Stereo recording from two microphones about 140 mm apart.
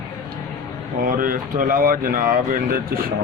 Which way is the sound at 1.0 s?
85° right.